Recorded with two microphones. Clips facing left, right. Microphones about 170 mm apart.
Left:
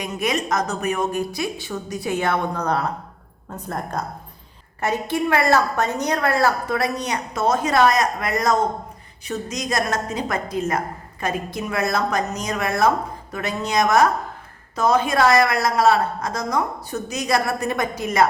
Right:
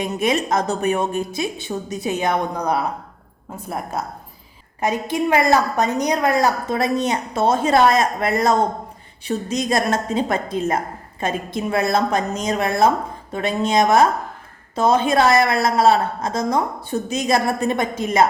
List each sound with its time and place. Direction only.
0.2 s a woman's voice: 25° right (ahead or behind)